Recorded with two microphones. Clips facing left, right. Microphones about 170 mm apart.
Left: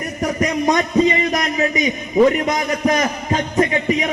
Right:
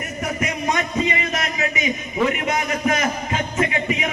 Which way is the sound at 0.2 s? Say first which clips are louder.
Left 6 dB; 35° left (ahead or behind).